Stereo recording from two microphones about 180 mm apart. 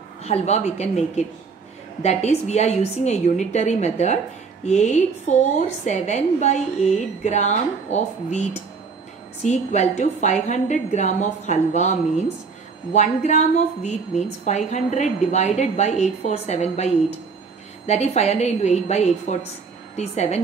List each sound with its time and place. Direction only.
0.2 s a woman's voice: 35° left (ahead or behind)